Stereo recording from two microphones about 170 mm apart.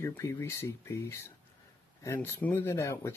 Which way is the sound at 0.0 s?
15° left (ahead or behind).